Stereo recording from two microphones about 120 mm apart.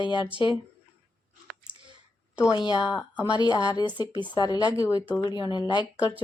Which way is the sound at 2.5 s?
35° left (ahead or behind).